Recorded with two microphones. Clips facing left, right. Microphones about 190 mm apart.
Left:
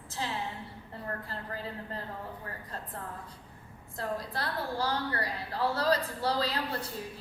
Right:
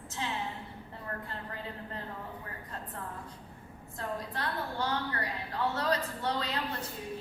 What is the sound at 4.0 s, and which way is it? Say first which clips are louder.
A woman's voice: left 2 dB; 35° left (ahead or behind).